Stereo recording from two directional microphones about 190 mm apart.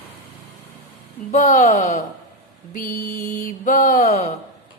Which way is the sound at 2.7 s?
45° left (ahead or behind).